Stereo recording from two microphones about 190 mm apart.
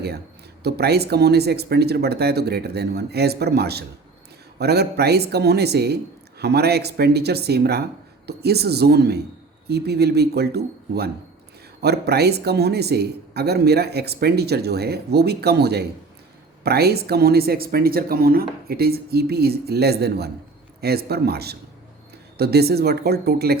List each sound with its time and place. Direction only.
0.6 s speech: 60° right (ahead or behind)